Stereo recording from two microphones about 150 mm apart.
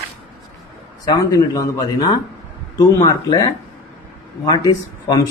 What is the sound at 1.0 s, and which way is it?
Speech, 25° left (ahead or behind).